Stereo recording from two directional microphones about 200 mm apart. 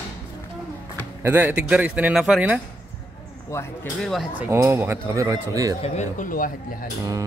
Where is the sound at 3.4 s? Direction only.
15° left (ahead or behind).